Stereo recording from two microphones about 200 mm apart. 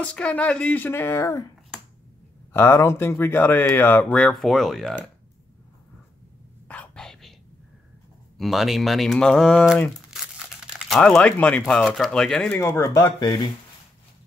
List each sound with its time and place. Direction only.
0.0 s speech: 5° left (ahead or behind)
2.5 s speech: 10° left (ahead or behind)
6.7 s whispering: 5° left (ahead or behind)
8.4 s speech: centre (ahead or behind); by 13.5 s 20° left (ahead or behind)